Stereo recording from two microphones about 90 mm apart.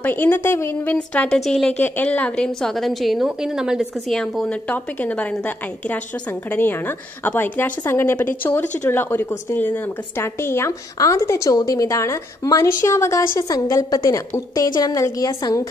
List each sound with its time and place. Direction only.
0.0 s a woman's voice: 20° left (ahead or behind)
1.8 s a woman's voice: 20° left (ahead or behind); by 3.8 s 5° right (ahead or behind)
4.1 s a woman's voice: 5° left (ahead or behind); by 15.6 s 45° left (ahead or behind)